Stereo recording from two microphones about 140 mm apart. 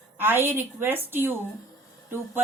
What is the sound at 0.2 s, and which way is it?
Speech, 15° right (ahead or behind).